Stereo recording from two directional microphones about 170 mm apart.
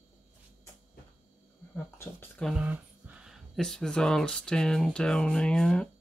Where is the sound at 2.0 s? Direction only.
15° left (ahead or behind).